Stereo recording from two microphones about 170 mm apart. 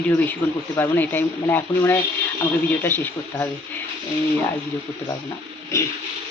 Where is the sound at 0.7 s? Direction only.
10° left (ahead or behind).